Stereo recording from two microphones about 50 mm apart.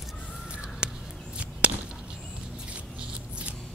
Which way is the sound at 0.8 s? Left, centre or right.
Right.